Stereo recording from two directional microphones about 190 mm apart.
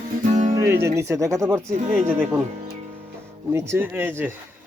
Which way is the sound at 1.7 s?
40° right (ahead or behind).